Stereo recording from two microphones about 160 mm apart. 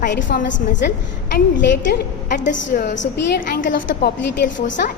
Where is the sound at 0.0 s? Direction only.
55° left (ahead or behind).